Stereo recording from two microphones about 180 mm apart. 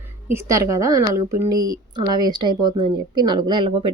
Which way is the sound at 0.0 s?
15° right (ahead or behind).